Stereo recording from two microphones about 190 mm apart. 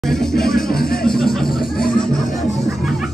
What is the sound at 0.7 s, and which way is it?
Music, 50° left (ahead or behind).